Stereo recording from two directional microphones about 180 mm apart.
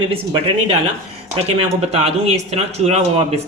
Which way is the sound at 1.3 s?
35° right (ahead or behind).